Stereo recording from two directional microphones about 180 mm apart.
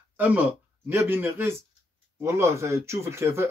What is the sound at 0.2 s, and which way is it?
Speech, 10° right (ahead or behind).